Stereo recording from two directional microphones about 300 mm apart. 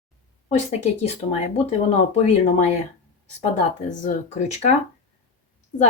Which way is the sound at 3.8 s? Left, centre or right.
Left.